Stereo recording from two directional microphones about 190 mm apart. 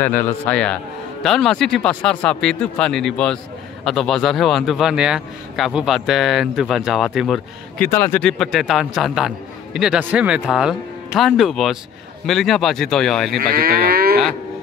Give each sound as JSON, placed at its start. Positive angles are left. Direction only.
{"t": 0.0, "sound": "speech", "side_deg": 10}
{"t": 7.9, "sound": "speech", "side_deg": 10}
{"t": 13.4, "sound": "livestock", "side_deg": -50}